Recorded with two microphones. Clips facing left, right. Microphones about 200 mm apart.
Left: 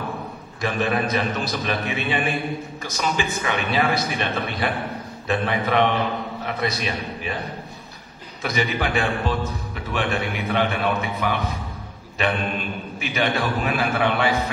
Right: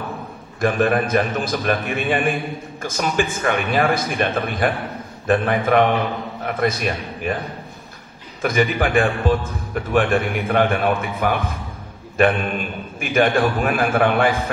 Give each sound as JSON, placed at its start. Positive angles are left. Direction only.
{"t": 0.6, "sound": "speech", "side_deg": -50}
{"t": 8.4, "sound": "speech", "side_deg": -50}